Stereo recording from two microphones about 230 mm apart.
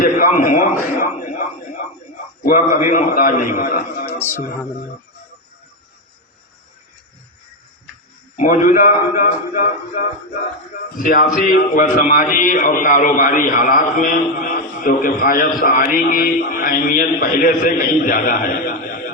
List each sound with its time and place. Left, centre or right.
0.0 s a man's voice: left
4.2 s music: centre
8.4 s a man's voice: left